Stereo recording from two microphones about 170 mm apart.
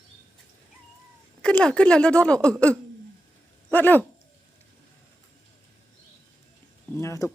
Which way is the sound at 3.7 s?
10° left (ahead or behind).